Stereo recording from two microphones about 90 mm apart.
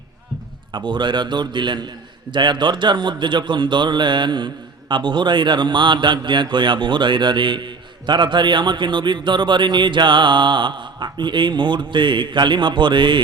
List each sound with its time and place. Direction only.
0.7 s a man's voice: 60° right (ahead or behind)